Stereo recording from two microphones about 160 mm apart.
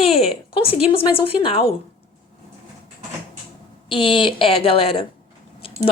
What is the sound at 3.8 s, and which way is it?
A woman's voice, 30° left (ahead or behind).